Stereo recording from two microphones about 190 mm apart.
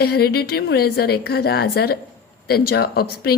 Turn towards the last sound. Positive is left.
turn(degrees=55)  # may be behind; listen again after turning